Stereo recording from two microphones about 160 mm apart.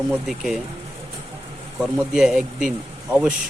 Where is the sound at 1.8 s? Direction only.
5° right (ahead or behind).